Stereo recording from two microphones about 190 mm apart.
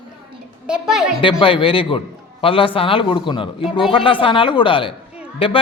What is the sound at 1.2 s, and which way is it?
A man's voice, 30° left (ahead or behind).